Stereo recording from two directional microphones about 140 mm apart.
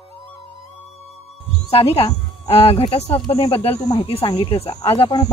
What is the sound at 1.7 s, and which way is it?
A woman's voice, 40° left (ahead or behind).